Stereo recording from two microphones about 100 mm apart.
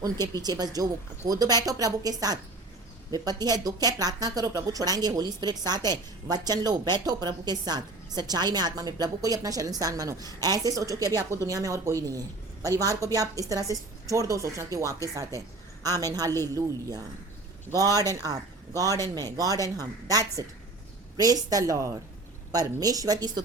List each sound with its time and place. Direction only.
0.3 s speech: 40° right (ahead or behind)
17.7 s speech: 35° right (ahead or behind)